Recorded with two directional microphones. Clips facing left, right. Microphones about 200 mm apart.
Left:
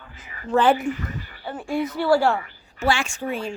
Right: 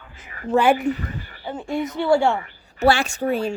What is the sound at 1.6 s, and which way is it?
Speech, 20° right (ahead or behind).